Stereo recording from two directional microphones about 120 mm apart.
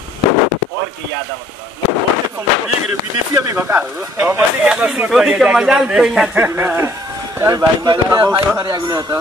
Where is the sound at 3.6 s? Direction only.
15° right (ahead or behind).